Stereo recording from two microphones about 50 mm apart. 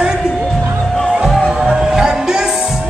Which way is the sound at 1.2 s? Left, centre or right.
Centre.